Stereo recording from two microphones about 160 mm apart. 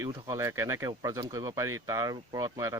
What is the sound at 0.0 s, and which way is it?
Speech, 25° right (ahead or behind).